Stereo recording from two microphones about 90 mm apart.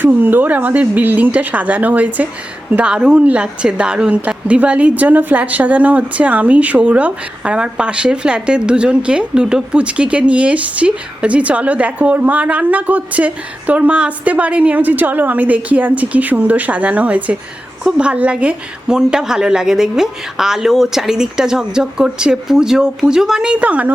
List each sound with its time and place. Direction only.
0.0 s a woman's voice: 20° right (ahead or behind)